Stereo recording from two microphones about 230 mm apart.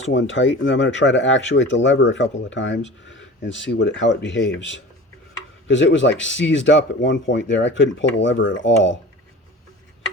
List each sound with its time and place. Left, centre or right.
0.1 s speech: left